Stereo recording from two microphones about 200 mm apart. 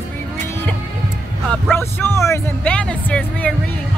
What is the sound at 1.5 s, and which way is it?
Speech, 10° left (ahead or behind).